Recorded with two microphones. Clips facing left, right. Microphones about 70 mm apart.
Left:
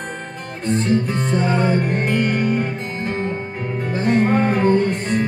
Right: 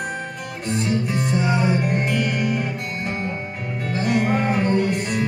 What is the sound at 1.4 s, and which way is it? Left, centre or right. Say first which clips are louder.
Music: left 3 dB; centre.